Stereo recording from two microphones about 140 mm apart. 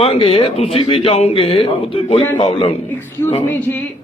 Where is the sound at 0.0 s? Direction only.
40° left (ahead or behind).